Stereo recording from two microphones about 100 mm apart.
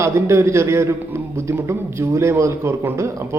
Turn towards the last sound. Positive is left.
turn(degrees=-25)  # may be behind; listen again after turning